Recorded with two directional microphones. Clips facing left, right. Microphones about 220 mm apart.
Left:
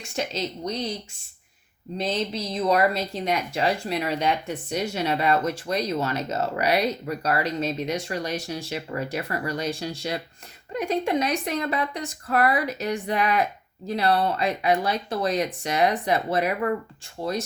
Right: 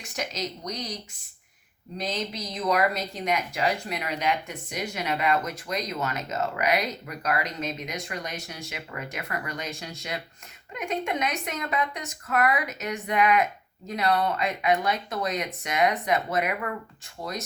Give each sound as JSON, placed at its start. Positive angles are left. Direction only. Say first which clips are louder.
{"t": 0.0, "sound": "speech", "louder": "left 4 dB", "side_deg": 30}
{"t": 2.0, "sound": "speech", "louder": "left 4 dB", "side_deg": 30}